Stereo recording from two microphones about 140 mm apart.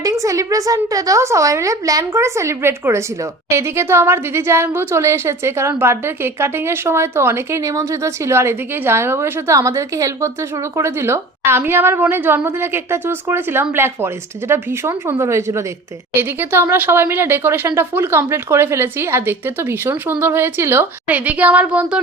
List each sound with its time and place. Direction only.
0.0 s a woman's voice: 25° right (ahead or behind); by 22.0 s 10° right (ahead or behind)